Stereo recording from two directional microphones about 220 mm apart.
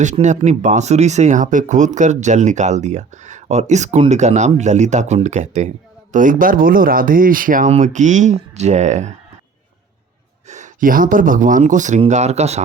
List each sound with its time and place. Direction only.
0.0 s speech: 35° right (ahead or behind)
10.5 s speech: 35° right (ahead or behind)